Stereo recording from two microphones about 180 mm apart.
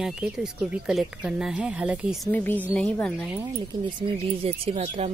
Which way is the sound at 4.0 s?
30° right (ahead or behind).